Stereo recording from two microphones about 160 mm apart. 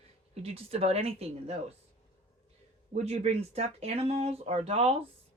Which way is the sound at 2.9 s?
45° right (ahead or behind).